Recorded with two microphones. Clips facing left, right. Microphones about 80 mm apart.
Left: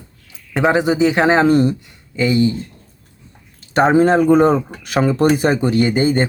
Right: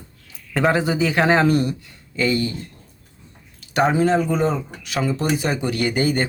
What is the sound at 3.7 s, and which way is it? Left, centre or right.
Speech, left.